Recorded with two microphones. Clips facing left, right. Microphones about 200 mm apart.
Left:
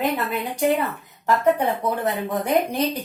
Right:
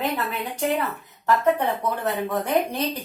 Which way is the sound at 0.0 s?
15° left (ahead or behind).